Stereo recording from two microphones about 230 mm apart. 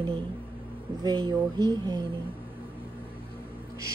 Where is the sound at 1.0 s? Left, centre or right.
Right.